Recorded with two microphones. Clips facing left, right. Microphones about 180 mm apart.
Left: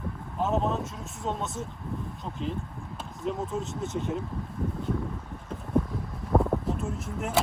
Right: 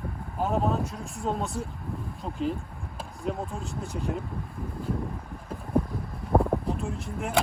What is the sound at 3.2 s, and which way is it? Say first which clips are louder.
Speech: left 2 dB; centre (ahead or behind).